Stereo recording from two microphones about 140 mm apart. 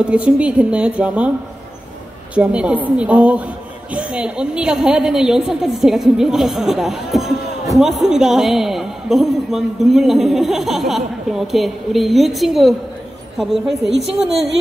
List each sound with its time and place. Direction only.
0.1 s a woman's voice: 10° right (ahead or behind)
2.3 s a woman's voice: 10° right (ahead or behind)